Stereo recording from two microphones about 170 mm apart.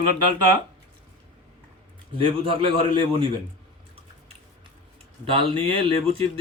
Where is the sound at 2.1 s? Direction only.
30° right (ahead or behind).